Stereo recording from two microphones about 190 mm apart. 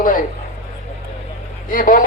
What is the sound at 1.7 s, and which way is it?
Speech, 45° left (ahead or behind).